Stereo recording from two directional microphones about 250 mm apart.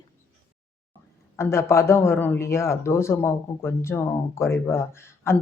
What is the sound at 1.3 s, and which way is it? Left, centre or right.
A man's voice, centre.